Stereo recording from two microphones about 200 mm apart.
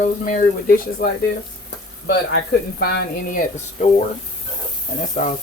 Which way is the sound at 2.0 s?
55° left (ahead or behind).